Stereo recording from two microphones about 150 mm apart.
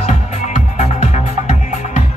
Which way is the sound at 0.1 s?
50° left (ahead or behind).